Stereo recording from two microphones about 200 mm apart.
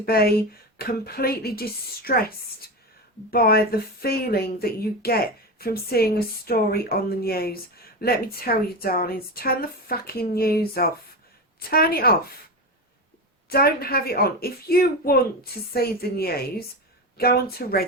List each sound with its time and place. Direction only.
0.0 s speech: 50° left (ahead or behind)
13.5 s speech: 50° left (ahead or behind)